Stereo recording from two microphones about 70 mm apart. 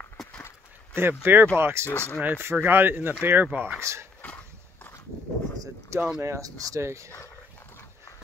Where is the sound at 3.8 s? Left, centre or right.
Right.